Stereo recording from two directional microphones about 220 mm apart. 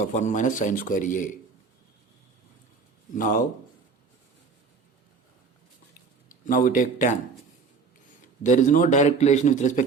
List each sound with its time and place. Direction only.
0.0 s speech: 35° left (ahead or behind)
3.2 s speech: 40° left (ahead or behind)
6.5 s speech: 40° left (ahead or behind)
8.4 s speech: 35° left (ahead or behind)